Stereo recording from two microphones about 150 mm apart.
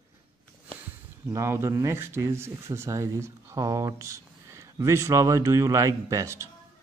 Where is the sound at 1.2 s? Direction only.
20° right (ahead or behind).